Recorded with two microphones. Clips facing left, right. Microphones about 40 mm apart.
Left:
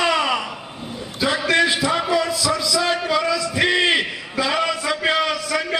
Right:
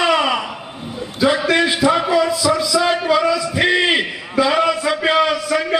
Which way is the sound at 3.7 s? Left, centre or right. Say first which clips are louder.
Right 2 dB; centre.